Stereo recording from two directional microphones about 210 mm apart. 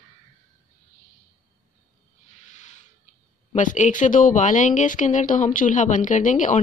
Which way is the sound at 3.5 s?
35° left (ahead or behind).